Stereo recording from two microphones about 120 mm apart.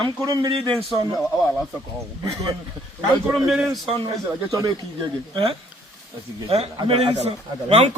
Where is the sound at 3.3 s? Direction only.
5° right (ahead or behind).